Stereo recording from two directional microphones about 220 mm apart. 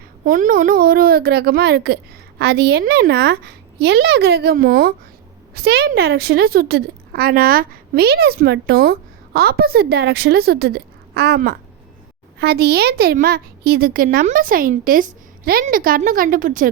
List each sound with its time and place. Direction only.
0.3 s a woman's voice: 35° right (ahead or behind)